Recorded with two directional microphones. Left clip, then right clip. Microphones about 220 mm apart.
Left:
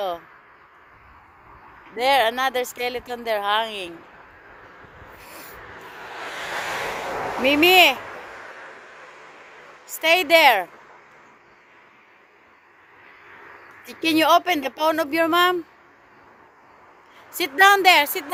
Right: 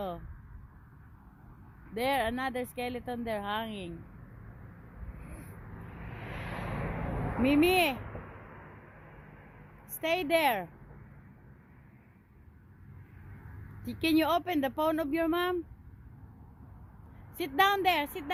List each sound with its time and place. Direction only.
2.0 s speech: 5° left (ahead or behind)
6.1 s vehicle: 30° left (ahead or behind)
7.4 s speech: 5° left (ahead or behind)
10.0 s speech: 5° left (ahead or behind)
13.8 s speech: 5° left (ahead or behind)
17.3 s a woman's voice: 5° left (ahead or behind)